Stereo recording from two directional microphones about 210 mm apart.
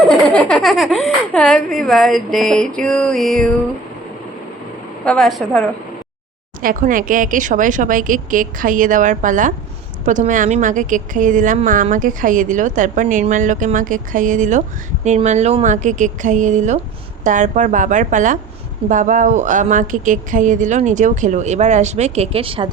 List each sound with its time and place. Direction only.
0.1 s speech: 5° left (ahead or behind)
5.0 s speech: centre (ahead or behind)
6.6 s a woman's voice: 40° right (ahead or behind); by 22.7 s 25° right (ahead or behind)